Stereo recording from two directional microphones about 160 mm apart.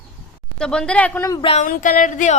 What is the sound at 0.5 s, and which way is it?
Speech, 5° left (ahead or behind).